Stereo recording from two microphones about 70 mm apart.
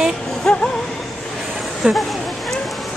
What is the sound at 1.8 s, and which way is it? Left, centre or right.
Speech, centre.